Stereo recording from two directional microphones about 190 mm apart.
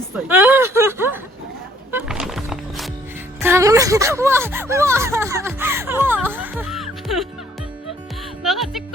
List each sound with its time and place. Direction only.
0.3 s a sound: 10° right (ahead or behind)
1.9 s music: 5° right (ahead or behind)
3.4 s speech: 15° right (ahead or behind)
6.2 s music: 10° right (ahead or behind)
8.4 s music: centre (ahead or behind)